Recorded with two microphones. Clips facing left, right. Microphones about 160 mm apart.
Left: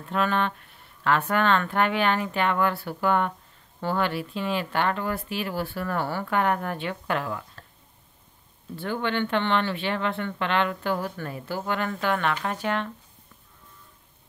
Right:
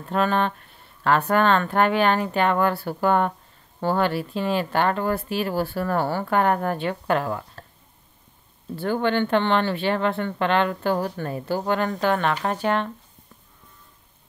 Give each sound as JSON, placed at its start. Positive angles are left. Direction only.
{"t": 0.0, "sound": "speech", "side_deg": -40}
{"t": 8.7, "sound": "speech", "side_deg": -40}